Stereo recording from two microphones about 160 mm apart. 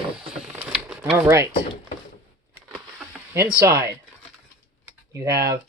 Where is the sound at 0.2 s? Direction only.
5° right (ahead or behind).